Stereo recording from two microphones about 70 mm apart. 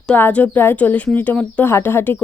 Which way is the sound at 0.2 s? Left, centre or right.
Left.